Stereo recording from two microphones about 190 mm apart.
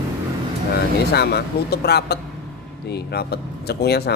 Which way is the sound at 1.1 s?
60° left (ahead or behind).